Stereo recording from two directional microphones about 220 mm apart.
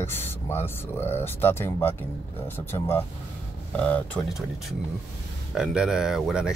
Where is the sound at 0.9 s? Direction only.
10° left (ahead or behind).